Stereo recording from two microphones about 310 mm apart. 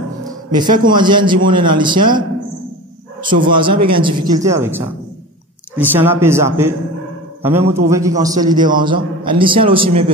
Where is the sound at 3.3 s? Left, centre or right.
Right.